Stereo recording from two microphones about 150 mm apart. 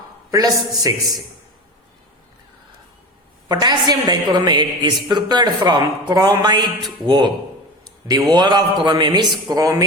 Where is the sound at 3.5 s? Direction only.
25° right (ahead or behind).